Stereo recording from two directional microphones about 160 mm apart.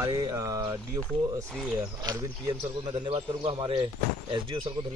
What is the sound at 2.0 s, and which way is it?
A man's voice, 25° right (ahead or behind).